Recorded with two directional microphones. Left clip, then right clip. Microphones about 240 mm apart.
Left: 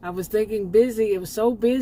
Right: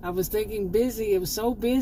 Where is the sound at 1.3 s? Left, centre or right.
Left.